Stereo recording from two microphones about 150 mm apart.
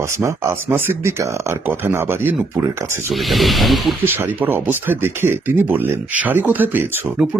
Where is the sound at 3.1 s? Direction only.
Centre (ahead or behind).